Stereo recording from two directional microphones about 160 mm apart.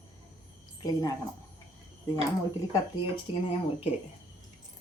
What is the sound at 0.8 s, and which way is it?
Speech, 25° left (ahead or behind).